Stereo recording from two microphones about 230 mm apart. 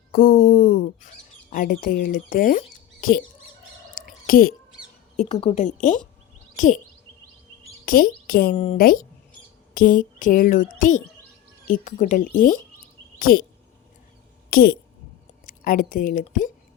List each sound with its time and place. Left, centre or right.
0.1 s speech: left
3.9 s a sound: left
5.1 s speech: left
7.9 s speech: left
8.5 s speech: left
8.8 s speech: left
14.5 s speech: left